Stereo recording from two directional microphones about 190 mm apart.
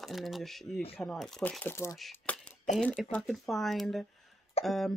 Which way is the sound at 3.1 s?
5° left (ahead or behind).